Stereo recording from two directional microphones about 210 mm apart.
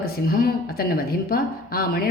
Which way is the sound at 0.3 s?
45° left (ahead or behind).